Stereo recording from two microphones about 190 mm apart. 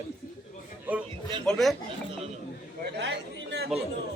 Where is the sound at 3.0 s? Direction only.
65° right (ahead or behind).